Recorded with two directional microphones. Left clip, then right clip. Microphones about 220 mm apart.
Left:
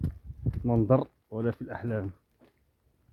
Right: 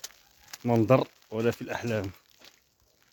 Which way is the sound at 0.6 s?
25° right (ahead or behind).